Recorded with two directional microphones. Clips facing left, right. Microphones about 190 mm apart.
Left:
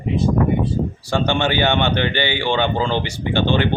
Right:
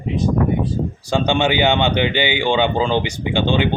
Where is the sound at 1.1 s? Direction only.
15° right (ahead or behind).